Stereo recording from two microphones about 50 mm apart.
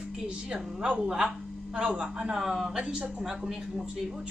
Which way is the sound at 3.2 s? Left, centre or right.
Centre.